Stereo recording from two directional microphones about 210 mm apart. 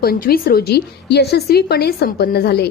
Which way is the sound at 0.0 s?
45° left (ahead or behind).